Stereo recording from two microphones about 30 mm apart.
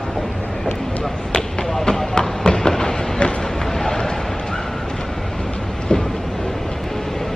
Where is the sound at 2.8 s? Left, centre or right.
Left.